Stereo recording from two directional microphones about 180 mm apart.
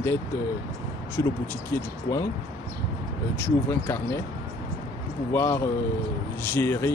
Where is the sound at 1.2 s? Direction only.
20° left (ahead or behind).